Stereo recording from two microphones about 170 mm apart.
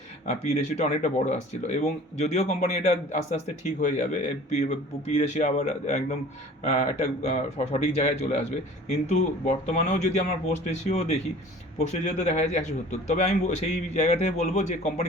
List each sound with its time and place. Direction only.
0.3 s a man's voice: 40° left (ahead or behind)